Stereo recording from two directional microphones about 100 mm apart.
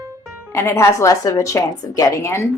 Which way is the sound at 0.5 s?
25° left (ahead or behind).